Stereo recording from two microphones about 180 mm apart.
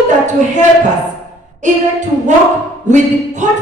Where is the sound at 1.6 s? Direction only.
40° right (ahead or behind).